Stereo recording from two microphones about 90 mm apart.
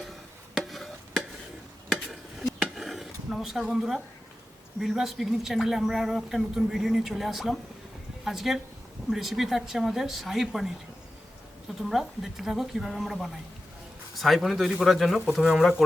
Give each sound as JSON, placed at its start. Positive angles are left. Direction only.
{"t": 0.5, "sound": "a sound", "side_deg": 0}
{"t": 2.6, "sound": "chop", "side_deg": 0}
{"t": 4.8, "sound": "speech", "side_deg": 0}
{"t": 11.8, "sound": "speech", "side_deg": -5}